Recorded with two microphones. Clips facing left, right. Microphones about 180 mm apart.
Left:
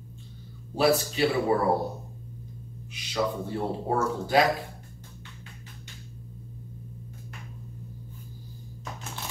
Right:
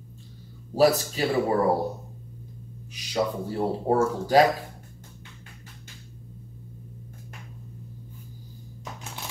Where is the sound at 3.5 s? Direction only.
30° right (ahead or behind).